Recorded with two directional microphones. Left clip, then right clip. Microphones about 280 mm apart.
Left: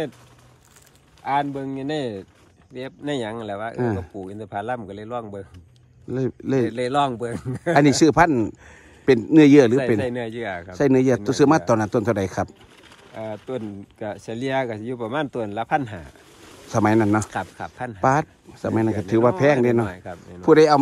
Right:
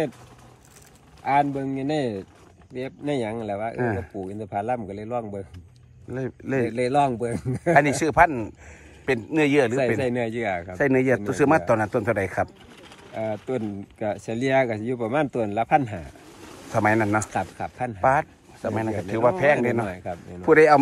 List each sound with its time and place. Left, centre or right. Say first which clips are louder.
1.2 s a man's voice: right 2 dB; centre
9.8 s speech: left 1 dB; centre
10.8 s a man's voice: left 3 dB; centre
13.1 s speech: right 2 dB; centre
18.0 s a man's voice: left 1 dB; left
19.9 s speech: right 3 dB; centre